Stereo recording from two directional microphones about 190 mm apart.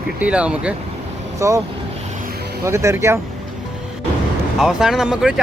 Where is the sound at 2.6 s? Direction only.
15° right (ahead or behind).